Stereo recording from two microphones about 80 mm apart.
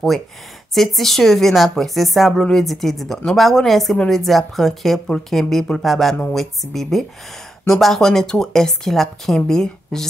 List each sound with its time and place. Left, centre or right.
0.7 s a woman's voice: centre